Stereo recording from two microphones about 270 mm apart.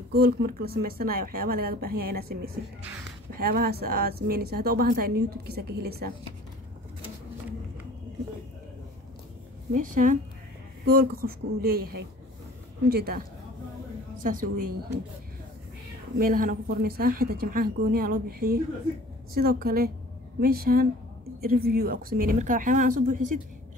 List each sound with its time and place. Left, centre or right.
0.1 s a woman's voice: right
3.3 s a woman's voice: right
9.7 s a woman's voice: right
16.2 s a woman's voice: right